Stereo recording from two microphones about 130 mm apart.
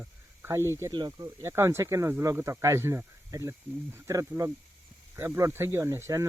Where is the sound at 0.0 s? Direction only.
20° right (ahead or behind).